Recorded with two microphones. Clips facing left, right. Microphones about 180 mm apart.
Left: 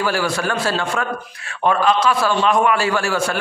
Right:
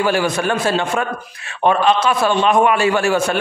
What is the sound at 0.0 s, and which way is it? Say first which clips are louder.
A man's voice: right 3 dB; 20° right (ahead or behind).